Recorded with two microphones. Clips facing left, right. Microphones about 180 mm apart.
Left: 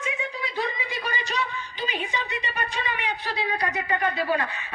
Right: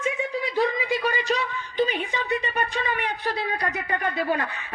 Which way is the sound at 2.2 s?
50° right (ahead or behind).